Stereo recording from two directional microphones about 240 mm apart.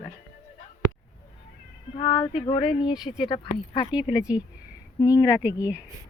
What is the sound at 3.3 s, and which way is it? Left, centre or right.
Speech, centre.